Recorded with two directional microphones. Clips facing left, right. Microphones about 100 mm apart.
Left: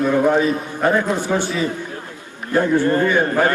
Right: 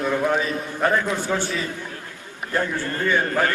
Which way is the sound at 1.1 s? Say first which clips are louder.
Left 4 dB; 15° left (ahead or behind).